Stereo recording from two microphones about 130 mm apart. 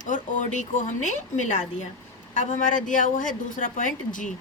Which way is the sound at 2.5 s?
85° left.